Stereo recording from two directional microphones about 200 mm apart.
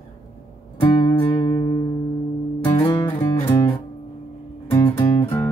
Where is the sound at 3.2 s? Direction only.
30° left (ahead or behind).